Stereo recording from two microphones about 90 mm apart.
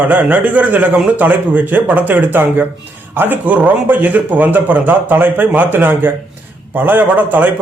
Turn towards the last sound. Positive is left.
turn(degrees=-20)  # may be behind; listen again after turning